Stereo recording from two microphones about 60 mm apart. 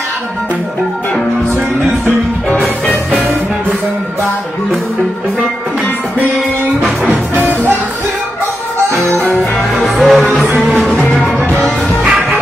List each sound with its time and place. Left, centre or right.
2.6 s music: centre
7.1 s music: right
9.3 s music: centre